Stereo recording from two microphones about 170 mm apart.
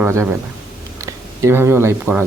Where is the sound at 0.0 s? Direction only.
15° right (ahead or behind).